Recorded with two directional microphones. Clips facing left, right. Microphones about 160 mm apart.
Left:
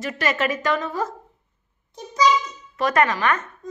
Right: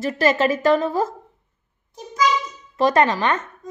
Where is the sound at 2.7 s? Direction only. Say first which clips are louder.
Right 3 dB; 30° right (ahead or behind).